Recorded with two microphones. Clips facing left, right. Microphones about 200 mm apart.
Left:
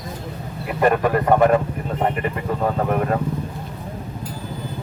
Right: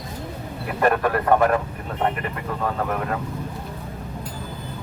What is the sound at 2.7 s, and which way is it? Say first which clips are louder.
Speech: left 5 dB; 25° left (ahead or behind).